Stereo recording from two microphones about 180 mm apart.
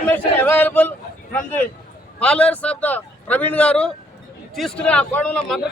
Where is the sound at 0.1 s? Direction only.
10° left (ahead or behind).